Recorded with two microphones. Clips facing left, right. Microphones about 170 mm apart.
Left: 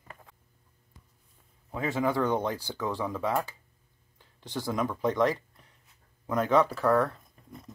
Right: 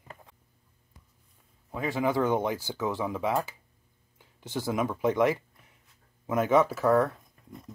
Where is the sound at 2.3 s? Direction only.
20° right (ahead or behind).